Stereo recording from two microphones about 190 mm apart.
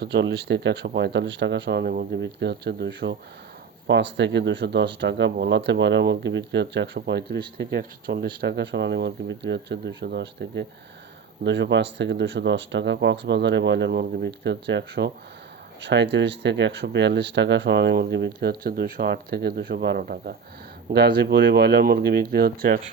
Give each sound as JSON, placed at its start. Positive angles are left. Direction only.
{"t": 0.0, "sound": "speech", "side_deg": -60}